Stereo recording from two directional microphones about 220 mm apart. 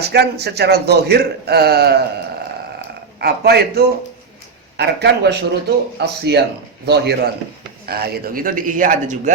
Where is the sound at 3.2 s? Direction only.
45° right (ahead or behind).